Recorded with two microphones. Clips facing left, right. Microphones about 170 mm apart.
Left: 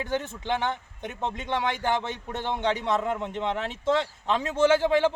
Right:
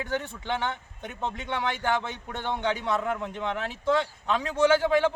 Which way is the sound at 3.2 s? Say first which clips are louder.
Left 2 dB; 25° left (ahead or behind).